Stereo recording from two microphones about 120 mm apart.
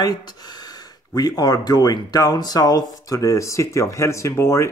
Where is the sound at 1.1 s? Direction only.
35° left (ahead or behind).